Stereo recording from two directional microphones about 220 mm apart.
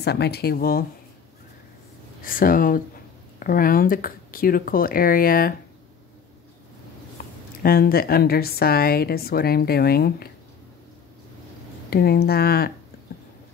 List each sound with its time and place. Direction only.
0.0 s a woman's voice: 50° left (ahead or behind)
2.2 s speech: 40° left (ahead or behind)
7.6 s a woman's voice: 45° left (ahead or behind)
11.9 s a woman's voice: 45° left (ahead or behind)